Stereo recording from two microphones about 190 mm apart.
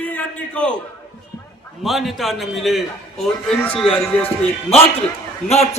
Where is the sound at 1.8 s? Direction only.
Centre (ahead or behind).